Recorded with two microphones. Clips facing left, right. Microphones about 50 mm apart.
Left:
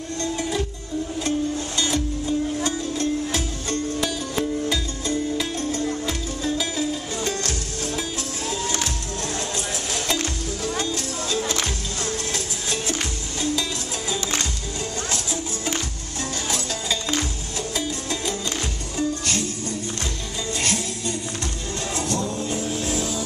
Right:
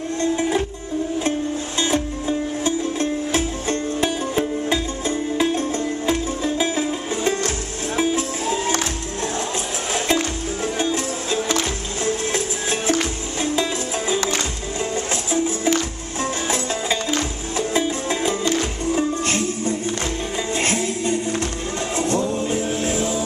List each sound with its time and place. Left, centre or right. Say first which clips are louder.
0.2 s music: right 5 dB; right
1.8 s music: right 4 dB; right
9.9 s music: right 6 dB; right
15.3 s music: right 8 dB; right